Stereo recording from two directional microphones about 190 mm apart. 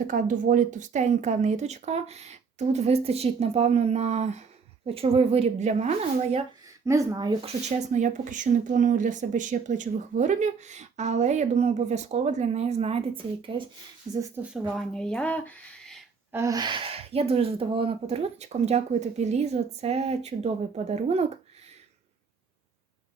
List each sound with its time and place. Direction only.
0.1 s speech: 45° right (ahead or behind)
6.8 s speech: 15° right (ahead or behind)
7.4 s speech: 40° right (ahead or behind); by 14.2 s 20° right (ahead or behind)
14.8 s speech: 5° left (ahead or behind)
16.3 s speech: 15° right (ahead or behind); by 21.2 s 35° right (ahead or behind)